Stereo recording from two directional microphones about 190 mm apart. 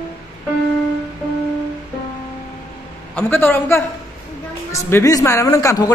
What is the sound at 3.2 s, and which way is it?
A man's voice, 10° left (ahead or behind).